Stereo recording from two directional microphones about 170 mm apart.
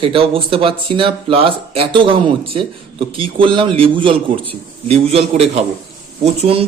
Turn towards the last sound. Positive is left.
turn(degrees=-35)  # may be behind; listen again after turning